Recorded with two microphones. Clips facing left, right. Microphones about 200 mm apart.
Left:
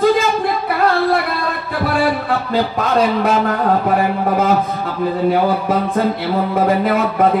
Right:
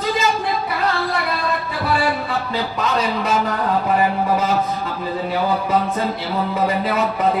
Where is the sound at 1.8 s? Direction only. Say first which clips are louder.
Left 4 dB; 55° left (ahead or behind).